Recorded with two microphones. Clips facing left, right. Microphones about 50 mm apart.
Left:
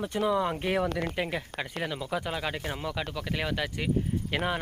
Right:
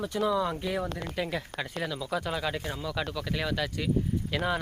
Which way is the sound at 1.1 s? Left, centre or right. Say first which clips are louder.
Even; left.